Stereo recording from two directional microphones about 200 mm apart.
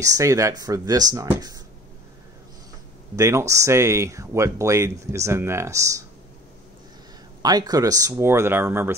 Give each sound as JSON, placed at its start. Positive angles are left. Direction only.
{"t": 0.0, "sound": "speech", "side_deg": -15}
{"t": 3.2, "sound": "speech", "side_deg": -15}
{"t": 7.4, "sound": "speech", "side_deg": -20}